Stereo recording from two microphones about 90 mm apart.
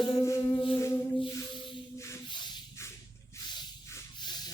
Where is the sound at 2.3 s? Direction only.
60° left (ahead or behind).